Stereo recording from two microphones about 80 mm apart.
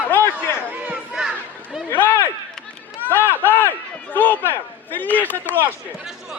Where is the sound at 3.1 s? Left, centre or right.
Left.